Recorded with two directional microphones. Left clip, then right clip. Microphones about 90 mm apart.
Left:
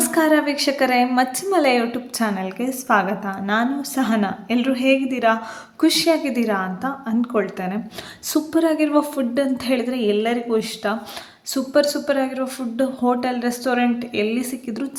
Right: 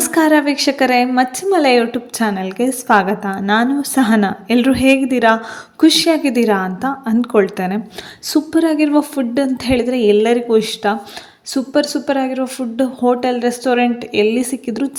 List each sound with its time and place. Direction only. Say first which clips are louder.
0.0 s a woman's voice: right 4 dB; 45° right (ahead or behind)
5.8 s a woman's voice: right 5 dB; 45° right (ahead or behind); by 7.8 s 65° right (ahead or behind)
8.3 s speech: right 4 dB; 30° right (ahead or behind); by 10.9 s 50° right (ahead or behind)
11.5 s speech: right 2 dB; 30° right (ahead or behind)